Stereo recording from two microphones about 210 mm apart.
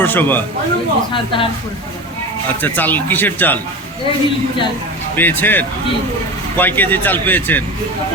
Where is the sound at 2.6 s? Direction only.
10° left (ahead or behind).